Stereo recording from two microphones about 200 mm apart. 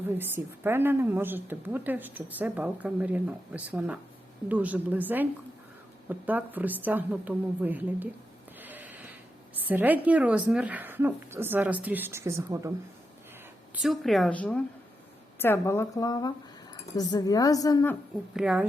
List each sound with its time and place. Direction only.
0.2 s a woman's voice: 10° right (ahead or behind)
8.6 s a sound: 10° right (ahead or behind)
9.6 s a woman's voice: 10° right (ahead or behind)
13.7 s a woman's voice: centre (ahead or behind); by 17.9 s 15° left (ahead or behind)
18.3 s a woman's voice: 5° right (ahead or behind)